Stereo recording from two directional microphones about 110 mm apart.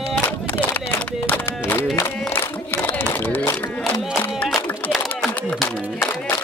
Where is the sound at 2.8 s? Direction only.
20° left (ahead or behind).